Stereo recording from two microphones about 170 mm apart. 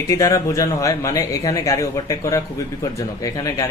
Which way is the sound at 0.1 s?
20° left (ahead or behind).